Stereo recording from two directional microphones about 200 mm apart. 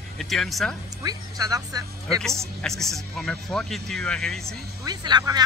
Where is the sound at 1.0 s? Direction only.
20° right (ahead or behind).